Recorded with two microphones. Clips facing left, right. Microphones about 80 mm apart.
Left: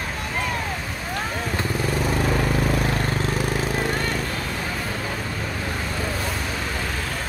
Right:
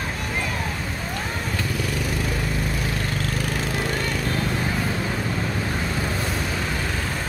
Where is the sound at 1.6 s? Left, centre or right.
Left.